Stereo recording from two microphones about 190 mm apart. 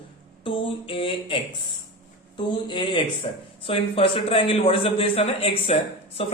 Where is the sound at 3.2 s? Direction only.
35° left (ahead or behind).